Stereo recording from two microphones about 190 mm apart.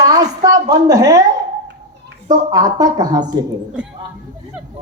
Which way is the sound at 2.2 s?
20° right (ahead or behind).